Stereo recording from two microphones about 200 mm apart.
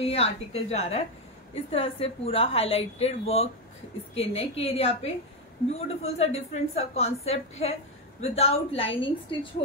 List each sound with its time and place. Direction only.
0.0 s a woman's voice: 30° left (ahead or behind)